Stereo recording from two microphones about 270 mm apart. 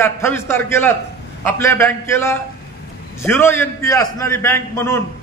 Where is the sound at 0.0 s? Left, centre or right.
Centre.